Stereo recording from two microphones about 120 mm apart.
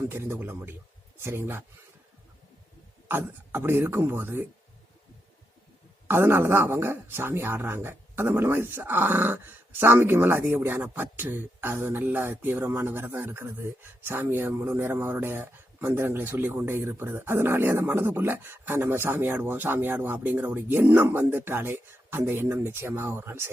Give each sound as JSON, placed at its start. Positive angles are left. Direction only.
{"t": 0.1, "sound": "speech", "side_deg": -20}
{"t": 3.1, "sound": "speech", "side_deg": -20}
{"t": 6.1, "sound": "speech", "side_deg": -20}